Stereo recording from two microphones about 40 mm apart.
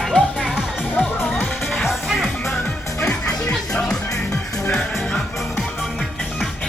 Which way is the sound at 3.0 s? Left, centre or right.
Left.